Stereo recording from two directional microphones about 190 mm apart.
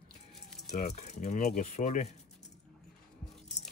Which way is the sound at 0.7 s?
35° left (ahead or behind).